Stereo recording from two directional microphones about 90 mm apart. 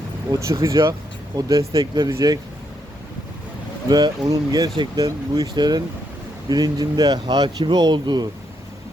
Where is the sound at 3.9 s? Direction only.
50° right (ahead or behind).